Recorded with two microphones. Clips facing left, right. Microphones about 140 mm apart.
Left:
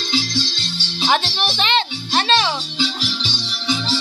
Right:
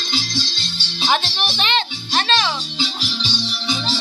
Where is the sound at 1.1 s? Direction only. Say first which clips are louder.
Left 1 dB; 20° left (ahead or behind).